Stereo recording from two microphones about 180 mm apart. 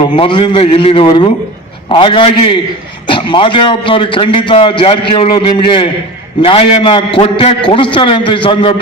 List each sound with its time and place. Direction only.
0.2 s a man's voice: 25° left (ahead or behind)